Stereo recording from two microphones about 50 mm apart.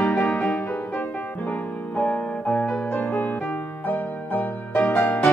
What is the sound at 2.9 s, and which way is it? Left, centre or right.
Music, left.